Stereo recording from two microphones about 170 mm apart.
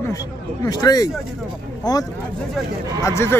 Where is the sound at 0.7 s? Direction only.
25° left (ahead or behind).